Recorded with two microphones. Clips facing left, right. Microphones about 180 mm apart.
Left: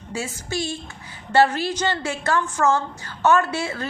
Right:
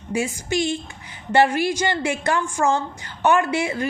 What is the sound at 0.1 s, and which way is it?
A woman's voice, 15° right (ahead or behind).